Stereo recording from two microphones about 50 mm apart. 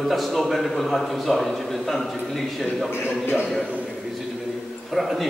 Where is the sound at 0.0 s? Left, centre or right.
Centre.